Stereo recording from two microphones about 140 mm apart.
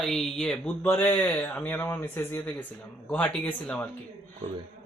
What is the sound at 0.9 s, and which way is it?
A man's voice, 15° left (ahead or behind).